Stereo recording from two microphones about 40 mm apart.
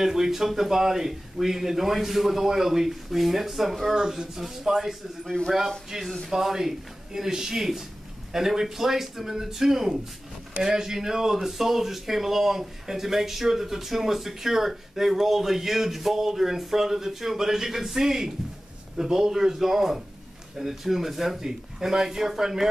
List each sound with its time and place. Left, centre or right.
0.0 s speech: centre
3.9 s speech: centre
5.3 s speech: left
5.9 s speech: centre